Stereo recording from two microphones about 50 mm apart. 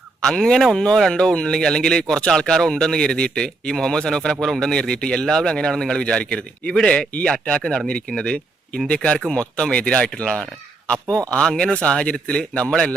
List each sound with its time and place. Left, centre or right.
0.2 s speech: centre
4.7 s speech: centre